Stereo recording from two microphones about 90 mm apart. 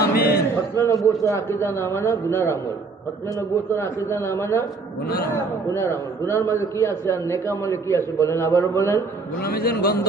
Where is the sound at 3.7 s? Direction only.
30° left (ahead or behind).